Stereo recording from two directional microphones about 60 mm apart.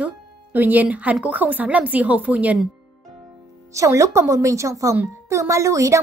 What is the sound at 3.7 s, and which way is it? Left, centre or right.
A woman's voice, right.